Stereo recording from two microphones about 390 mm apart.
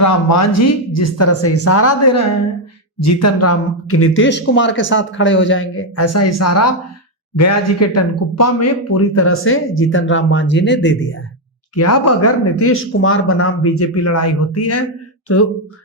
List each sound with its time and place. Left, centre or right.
0.0 s speech: left
11.7 s speech: left